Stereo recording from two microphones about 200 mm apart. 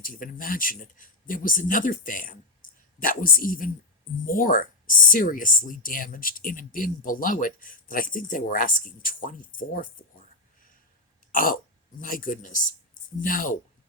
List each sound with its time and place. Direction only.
0.0 s speech: 45° left (ahead or behind)
11.3 s speech: 45° left (ahead or behind)